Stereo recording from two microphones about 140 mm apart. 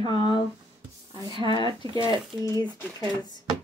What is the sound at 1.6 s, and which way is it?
Speech, 35° right (ahead or behind).